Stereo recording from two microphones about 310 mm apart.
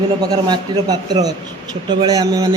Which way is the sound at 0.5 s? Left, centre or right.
Centre.